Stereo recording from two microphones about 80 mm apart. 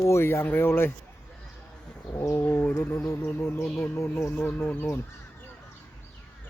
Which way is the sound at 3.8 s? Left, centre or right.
Left.